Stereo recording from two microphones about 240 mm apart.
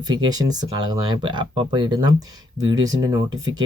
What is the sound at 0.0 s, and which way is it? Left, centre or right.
Speech, centre.